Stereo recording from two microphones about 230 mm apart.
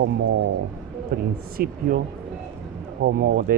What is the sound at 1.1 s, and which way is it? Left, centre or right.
Speech, right.